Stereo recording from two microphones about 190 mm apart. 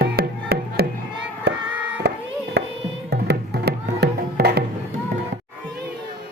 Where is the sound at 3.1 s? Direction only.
60° right (ahead or behind).